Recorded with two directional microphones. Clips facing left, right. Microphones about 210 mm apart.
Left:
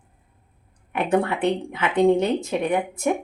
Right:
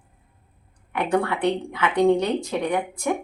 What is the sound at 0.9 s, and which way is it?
Speech, 20° left (ahead or behind).